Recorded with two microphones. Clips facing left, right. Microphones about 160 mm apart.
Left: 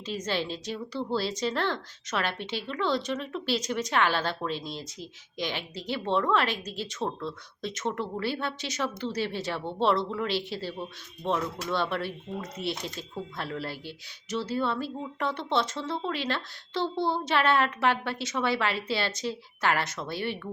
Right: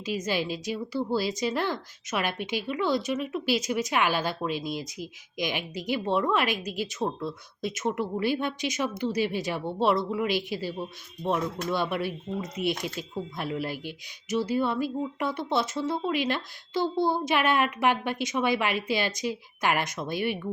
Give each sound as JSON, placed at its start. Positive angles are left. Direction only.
{"t": 0.0, "sound": "a woman's voice", "side_deg": -10}